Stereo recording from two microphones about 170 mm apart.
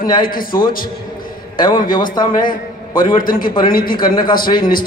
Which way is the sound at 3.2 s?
55° left (ahead or behind).